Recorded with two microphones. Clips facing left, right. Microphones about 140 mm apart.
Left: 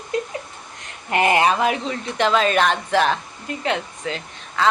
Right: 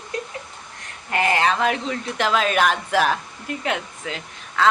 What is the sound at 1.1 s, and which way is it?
Speech, 20° left (ahead or behind).